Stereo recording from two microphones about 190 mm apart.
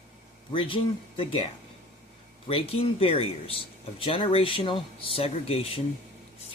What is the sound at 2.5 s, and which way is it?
Speech, 30° left (ahead or behind).